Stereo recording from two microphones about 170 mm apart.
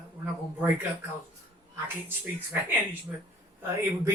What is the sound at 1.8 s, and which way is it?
Speech, 10° right (ahead or behind).